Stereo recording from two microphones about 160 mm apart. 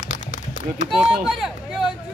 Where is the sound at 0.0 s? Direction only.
50° left (ahead or behind).